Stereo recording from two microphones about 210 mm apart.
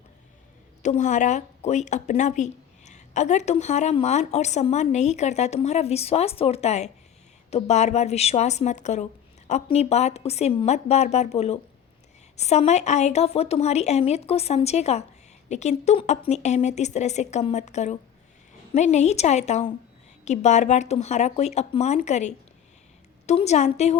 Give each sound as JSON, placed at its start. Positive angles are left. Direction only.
{"t": 0.8, "sound": "speech", "side_deg": 35}